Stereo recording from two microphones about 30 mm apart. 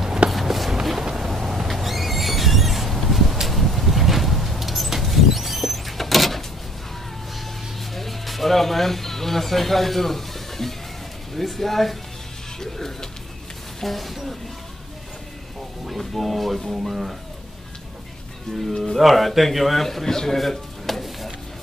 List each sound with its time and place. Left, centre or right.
0.3 s run: centre
1.1 s a sound: centre
7.9 s a sound: centre
11.3 s a man's voice: centre
12.5 s music: centre
13.8 s a man's voice: centre
16.2 s a man's voice: centre
18.7 s speech: centre
18.9 s a man's voice: centre
20.3 s a sound: centre